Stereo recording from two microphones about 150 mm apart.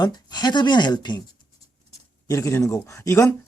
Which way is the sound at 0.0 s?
30° left (ahead or behind).